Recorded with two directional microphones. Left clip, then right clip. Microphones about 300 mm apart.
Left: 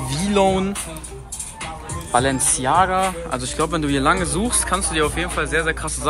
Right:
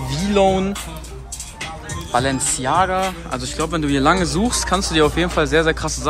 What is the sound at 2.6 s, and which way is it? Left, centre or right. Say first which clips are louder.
A man's voice: left 1 dB; centre.